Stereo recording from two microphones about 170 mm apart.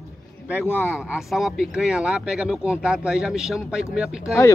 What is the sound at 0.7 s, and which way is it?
Speech, 5° right (ahead or behind).